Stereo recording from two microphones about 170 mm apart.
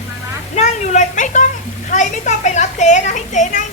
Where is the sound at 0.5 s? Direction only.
40° left (ahead or behind).